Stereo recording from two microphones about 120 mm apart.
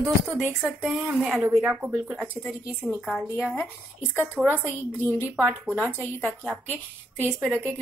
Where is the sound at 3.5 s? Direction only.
15° left (ahead or behind).